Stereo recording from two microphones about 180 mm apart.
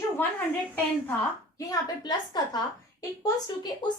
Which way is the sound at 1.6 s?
20° left (ahead or behind).